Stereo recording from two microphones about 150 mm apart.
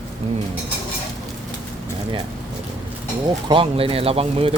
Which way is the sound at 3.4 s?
35° right (ahead or behind).